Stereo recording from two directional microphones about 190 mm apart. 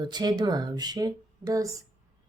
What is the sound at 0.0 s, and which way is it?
A woman's voice, 20° right (ahead or behind).